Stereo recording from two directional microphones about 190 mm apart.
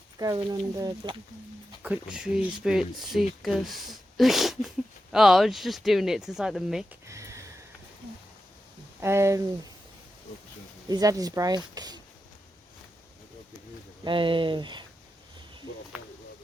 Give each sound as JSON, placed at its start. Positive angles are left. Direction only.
{"t": 0.2, "sound": "speech", "side_deg": -20}
{"t": 1.8, "sound": "speech", "side_deg": -5}
{"t": 7.1, "sound": "a sound", "side_deg": -15}
{"t": 9.0, "sound": "speech", "side_deg": -15}
{"t": 10.8, "sound": "speech", "side_deg": -20}
{"t": 14.0, "sound": "speech", "side_deg": -25}